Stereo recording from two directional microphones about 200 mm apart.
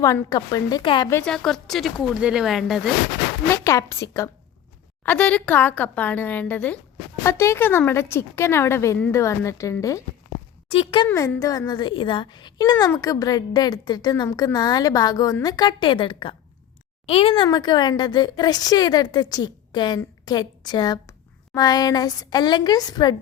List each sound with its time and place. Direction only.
0.0 s speech: 15° left (ahead or behind)
1.1 s speech: 5° left (ahead or behind)
3.5 s a woman's voice: 15° left (ahead or behind)
10.7 s speech: 25° left (ahead or behind)